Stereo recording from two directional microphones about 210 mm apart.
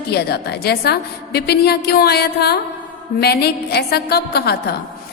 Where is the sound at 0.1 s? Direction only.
50° left (ahead or behind).